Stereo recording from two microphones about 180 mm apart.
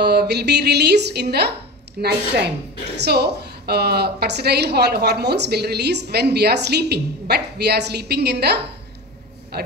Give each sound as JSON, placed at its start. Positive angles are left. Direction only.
{"t": 0.0, "sound": "a woman's voice", "side_deg": -65}